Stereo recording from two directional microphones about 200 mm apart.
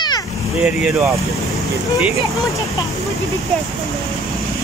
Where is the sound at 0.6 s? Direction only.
5° right (ahead or behind).